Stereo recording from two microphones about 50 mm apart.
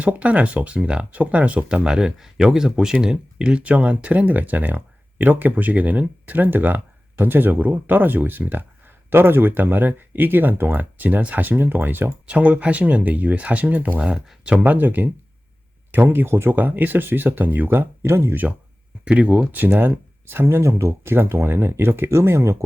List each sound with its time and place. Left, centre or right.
0.0 s speech: right
12.3 s speech: right
19.0 s speech: right
19.5 s speech: right
22.2 s speech: right